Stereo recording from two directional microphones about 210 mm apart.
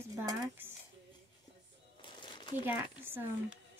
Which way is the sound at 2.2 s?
20° left (ahead or behind).